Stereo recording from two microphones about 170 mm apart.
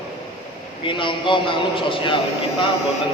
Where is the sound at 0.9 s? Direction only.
30° left (ahead or behind).